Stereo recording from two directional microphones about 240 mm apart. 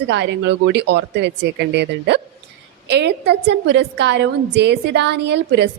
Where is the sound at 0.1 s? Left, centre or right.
Right.